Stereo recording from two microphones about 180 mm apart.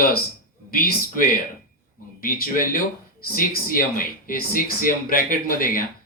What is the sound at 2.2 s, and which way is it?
Speech, 55° left (ahead or behind).